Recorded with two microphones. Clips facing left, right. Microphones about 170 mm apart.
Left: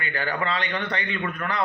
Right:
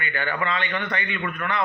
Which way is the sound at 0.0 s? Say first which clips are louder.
Even; 35° left (ahead or behind).